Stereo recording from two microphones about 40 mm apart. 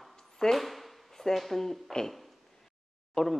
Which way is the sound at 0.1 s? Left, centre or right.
Centre.